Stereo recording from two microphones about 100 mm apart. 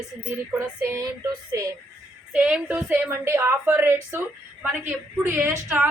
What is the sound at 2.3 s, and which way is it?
A woman's voice, 10° right (ahead or behind).